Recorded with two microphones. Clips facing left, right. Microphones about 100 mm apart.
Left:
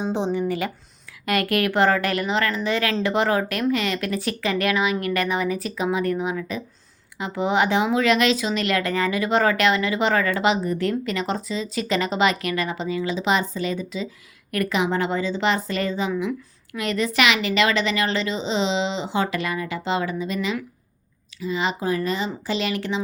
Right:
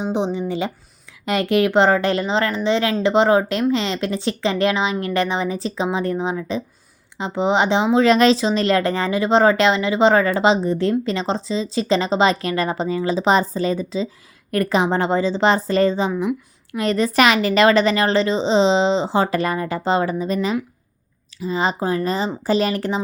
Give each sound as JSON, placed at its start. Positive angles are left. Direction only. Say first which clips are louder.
{"t": 0.0, "sound": "a woman's voice", "louder": "right 2 dB", "side_deg": -15}